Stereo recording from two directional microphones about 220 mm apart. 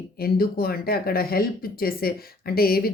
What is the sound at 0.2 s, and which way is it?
Speech, 45° left (ahead or behind).